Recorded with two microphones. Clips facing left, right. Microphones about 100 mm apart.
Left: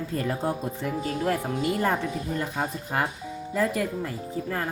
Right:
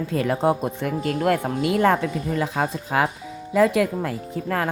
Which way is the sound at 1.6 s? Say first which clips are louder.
Right 7 dB; 85° right.